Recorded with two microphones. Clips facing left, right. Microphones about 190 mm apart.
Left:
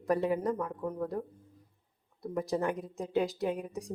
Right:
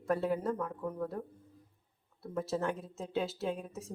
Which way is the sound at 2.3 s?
15° left (ahead or behind).